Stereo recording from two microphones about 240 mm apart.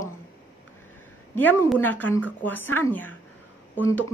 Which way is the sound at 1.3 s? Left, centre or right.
Centre.